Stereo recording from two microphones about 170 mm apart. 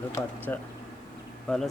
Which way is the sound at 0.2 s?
15° left (ahead or behind).